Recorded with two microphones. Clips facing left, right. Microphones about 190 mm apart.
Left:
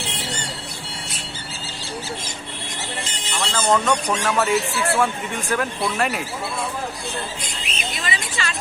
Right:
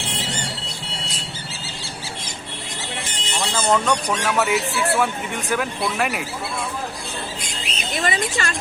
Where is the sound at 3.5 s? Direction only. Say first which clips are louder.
Even; 5° right (ahead or behind).